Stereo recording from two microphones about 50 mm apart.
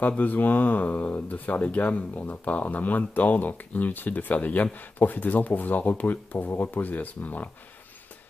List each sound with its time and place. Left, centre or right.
0.2 s speech: left